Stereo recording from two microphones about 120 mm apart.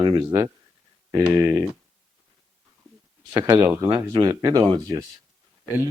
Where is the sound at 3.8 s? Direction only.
30° right (ahead or behind).